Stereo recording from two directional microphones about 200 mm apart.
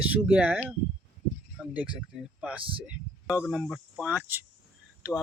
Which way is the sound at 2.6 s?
25° right (ahead or behind).